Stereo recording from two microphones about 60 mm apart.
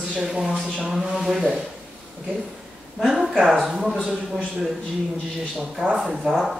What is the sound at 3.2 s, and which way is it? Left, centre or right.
Speech, centre.